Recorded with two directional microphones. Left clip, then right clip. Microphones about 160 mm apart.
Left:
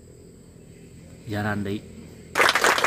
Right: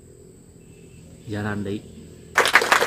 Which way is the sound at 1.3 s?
30° left (ahead or behind).